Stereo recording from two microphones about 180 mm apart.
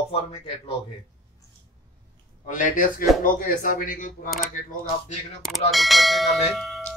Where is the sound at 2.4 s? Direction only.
45° left (ahead or behind).